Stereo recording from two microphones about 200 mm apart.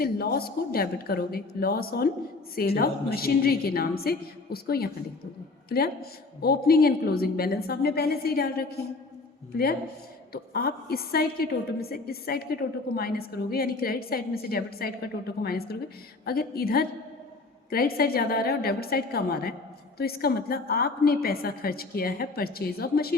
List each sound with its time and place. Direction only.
0.0 s a woman's voice: 50° left (ahead or behind)
10.3 s a woman's voice: 50° left (ahead or behind)